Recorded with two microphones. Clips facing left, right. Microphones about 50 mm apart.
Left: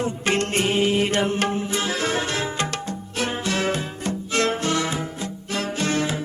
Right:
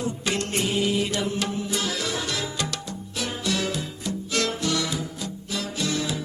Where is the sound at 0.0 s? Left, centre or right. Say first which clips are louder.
Left 4 dB; left.